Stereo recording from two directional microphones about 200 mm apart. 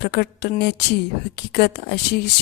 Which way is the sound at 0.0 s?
55° left (ahead or behind).